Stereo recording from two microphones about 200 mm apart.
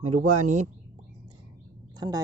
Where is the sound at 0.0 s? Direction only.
35° right (ahead or behind).